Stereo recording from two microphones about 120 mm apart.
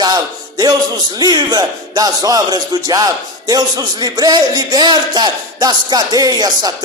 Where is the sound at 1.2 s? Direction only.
35° right (ahead or behind).